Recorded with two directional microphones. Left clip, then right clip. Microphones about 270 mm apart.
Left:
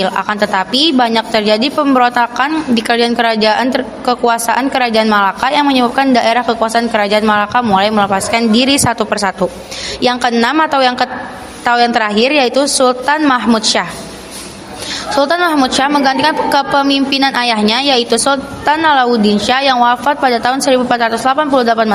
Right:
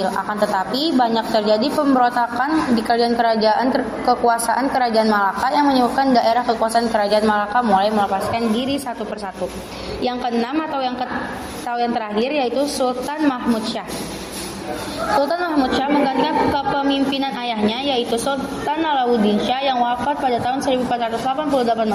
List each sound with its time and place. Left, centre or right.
0.0 s a woman's voice: left
0.7 s a woman's voice: left
0.9 s a woman's voice: left
5.5 s a man's voice: left
6.3 s a woman's voice: left
15.2 s a woman's voice: left